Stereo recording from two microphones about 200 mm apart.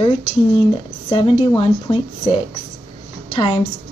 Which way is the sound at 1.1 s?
25° left (ahead or behind).